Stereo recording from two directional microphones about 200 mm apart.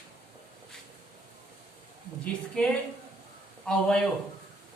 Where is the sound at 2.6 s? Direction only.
5° left (ahead or behind).